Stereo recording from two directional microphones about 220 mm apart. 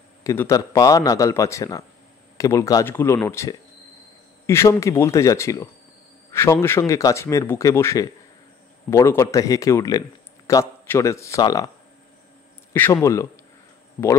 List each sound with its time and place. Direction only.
0.2 s a man's voice: 15° left (ahead or behind)
12.7 s a man's voice: 10° left (ahead or behind)